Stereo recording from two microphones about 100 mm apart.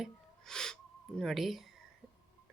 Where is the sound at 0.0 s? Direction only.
5° left (ahead or behind).